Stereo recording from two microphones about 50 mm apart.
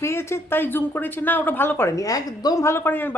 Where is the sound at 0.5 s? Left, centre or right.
Left.